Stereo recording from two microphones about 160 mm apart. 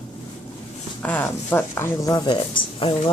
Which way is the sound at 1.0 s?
10° left (ahead or behind).